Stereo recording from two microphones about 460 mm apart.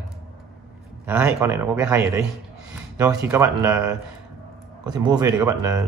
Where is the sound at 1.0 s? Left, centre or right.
Centre.